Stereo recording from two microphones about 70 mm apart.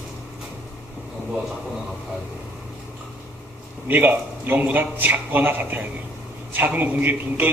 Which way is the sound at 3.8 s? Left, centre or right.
Right.